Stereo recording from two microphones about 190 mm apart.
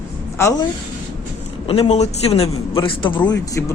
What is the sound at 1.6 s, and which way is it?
A woman's voice, 30° left (ahead or behind).